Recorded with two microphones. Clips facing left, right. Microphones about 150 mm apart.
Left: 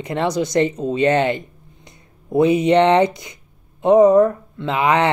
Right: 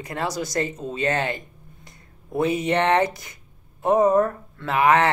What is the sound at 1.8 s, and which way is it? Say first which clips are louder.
Speech: left 9 dB; 20° left (ahead or behind).